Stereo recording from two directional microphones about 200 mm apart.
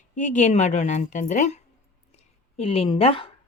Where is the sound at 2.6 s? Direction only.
30° left (ahead or behind).